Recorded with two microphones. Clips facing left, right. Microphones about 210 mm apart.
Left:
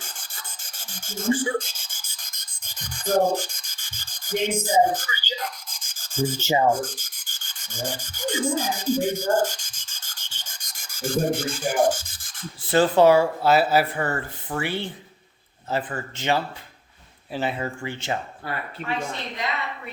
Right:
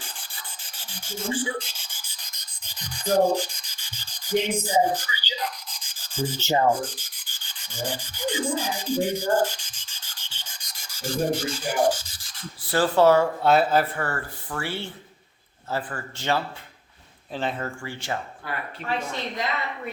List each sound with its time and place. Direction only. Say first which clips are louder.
0.0 s rub: even; 45° left (ahead or behind)
6.4 s speech: even; 10° left (ahead or behind)
6.7 s rub: left 1 dB; 45° left (ahead or behind)
12.6 s speech: left 2 dB; 20° left (ahead or behind)
13.4 s speech: left 1 dB; 5° left (ahead or behind)
14.0 s speech: left 3 dB; 20° left (ahead or behind)
17.3 s speech: left 2 dB; 10° left (ahead or behind)
17.8 s speech: left 3 dB; 20° left (ahead or behind)
18.8 s speech: even; 40° left (ahead or behind)